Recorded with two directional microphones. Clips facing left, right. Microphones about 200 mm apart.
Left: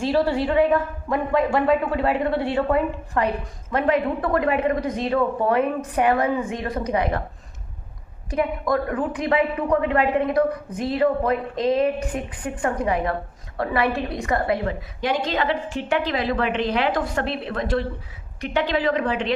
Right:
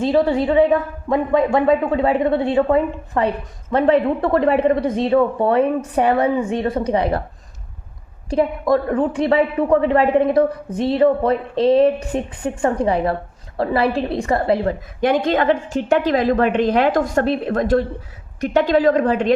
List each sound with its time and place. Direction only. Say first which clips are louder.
0.0 s a woman's voice: right 4 dB; 20° right (ahead or behind)
8.3 s a woman's voice: right 5 dB; 30° right (ahead or behind)
15.0 s a woman's voice: right 7 dB; 55° right (ahead or behind)